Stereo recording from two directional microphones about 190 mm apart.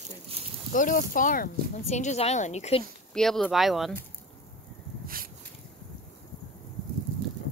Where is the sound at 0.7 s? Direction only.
45° left (ahead or behind).